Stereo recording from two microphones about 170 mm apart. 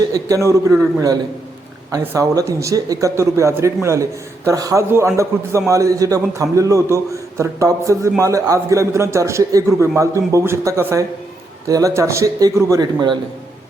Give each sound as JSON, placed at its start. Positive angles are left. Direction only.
{"t": 0.1, "sound": "a man's voice", "side_deg": -20}